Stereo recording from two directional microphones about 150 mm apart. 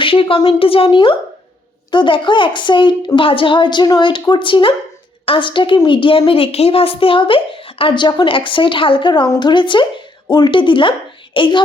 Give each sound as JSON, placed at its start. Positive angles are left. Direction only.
{"t": 0.0, "sound": "a woman's voice", "side_deg": 35}